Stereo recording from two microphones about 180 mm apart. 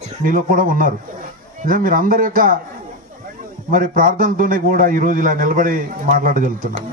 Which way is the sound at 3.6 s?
50° right (ahead or behind).